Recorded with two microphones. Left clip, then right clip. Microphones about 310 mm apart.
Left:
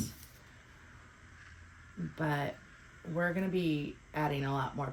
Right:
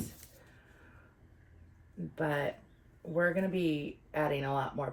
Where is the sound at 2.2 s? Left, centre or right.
Centre.